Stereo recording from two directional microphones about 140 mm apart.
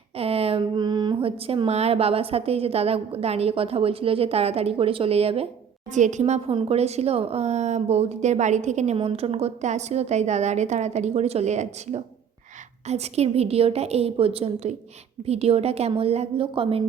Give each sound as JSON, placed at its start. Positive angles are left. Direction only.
{"t": 0.2, "sound": "speech", "side_deg": -45}
{"t": 5.9, "sound": "a woman's voice", "side_deg": -60}
{"t": 9.0, "sound": "a woman's voice", "side_deg": -45}